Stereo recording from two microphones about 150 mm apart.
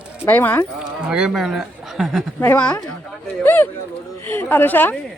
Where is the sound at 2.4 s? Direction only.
10° left (ahead or behind).